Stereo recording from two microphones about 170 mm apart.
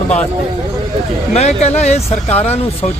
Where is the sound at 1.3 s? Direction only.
40° left (ahead or behind).